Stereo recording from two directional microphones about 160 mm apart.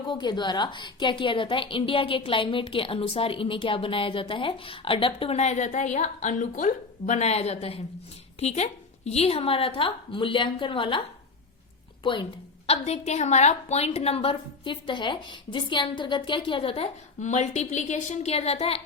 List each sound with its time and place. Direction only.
0.1 s a woman's voice: 30° left (ahead or behind)
12.6 s a woman's voice: 40° left (ahead or behind)